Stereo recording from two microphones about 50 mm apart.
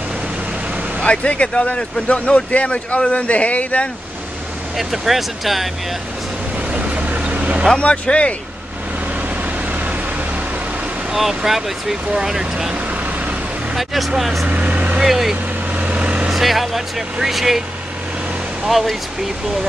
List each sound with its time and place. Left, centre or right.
1.0 s a man's voice: left
4.7 s speech: centre
6.7 s vehicle: right
7.7 s a man's voice: left
9.4 s vehicle: right
11.1 s speech: centre
12.7 s vehicle: right
13.7 s speech: centre
14.5 s vehicle: right
15.0 s speech: centre
15.7 s vehicle: right
16.3 s speech: centre
18.7 s speech: centre